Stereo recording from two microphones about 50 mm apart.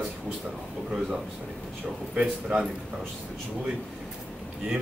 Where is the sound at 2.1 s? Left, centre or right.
Centre.